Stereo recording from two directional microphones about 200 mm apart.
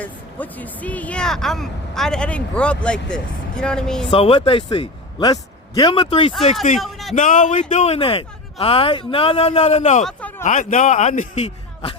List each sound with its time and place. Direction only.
0.0 s speech: 10° left (ahead or behind)
4.1 s speech: 25° left (ahead or behind)
6.7 s a sound: centre (ahead or behind)
7.2 s speech: 40° left (ahead or behind)
10.0 s a sound: 5° left (ahead or behind)
10.4 s speech: 40° left (ahead or behind)